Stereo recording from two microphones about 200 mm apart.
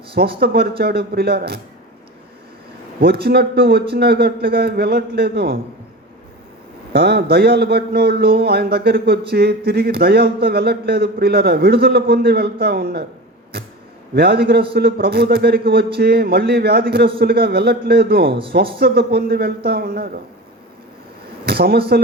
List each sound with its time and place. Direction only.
0.2 s speech: 55° right (ahead or behind)
3.0 s speech: 50° right (ahead or behind)
6.9 s speech: 55° right (ahead or behind)
14.2 s speech: 50° right (ahead or behind)
18.3 s speech: 25° right (ahead or behind)
18.8 s speech: 50° right (ahead or behind)
21.4 s a sound: 50° right (ahead or behind)